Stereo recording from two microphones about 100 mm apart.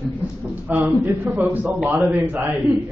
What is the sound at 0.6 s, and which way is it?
A man's voice, 20° right (ahead or behind).